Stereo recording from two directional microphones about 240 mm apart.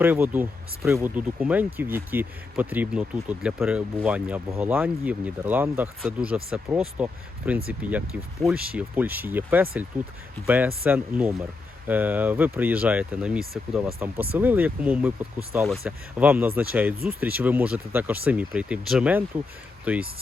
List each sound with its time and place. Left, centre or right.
0.0 s speech: centre